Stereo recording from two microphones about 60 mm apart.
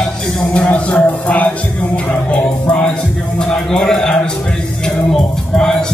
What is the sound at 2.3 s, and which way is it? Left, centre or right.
Music, centre.